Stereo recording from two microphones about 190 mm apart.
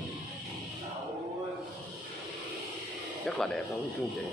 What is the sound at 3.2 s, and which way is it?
Speech, 5° left (ahead or behind).